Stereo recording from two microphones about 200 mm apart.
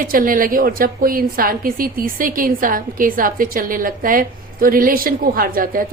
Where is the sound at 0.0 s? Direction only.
45° right (ahead or behind).